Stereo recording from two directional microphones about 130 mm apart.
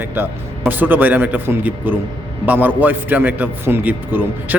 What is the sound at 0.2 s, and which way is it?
Speech, 15° right (ahead or behind).